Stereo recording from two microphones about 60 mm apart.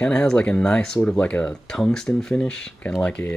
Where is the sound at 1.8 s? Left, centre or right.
Centre.